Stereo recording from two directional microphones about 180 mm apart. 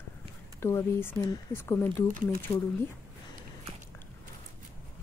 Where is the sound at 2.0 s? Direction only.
50° right (ahead or behind).